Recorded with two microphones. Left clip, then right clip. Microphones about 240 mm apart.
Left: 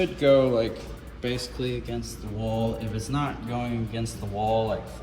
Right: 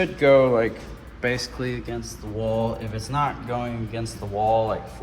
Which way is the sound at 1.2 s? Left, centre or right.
Centre.